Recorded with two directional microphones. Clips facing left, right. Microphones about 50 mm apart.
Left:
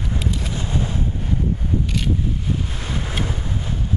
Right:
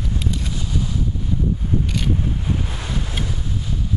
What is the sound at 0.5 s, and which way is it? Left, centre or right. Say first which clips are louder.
Wind noise: left 1 dB; left.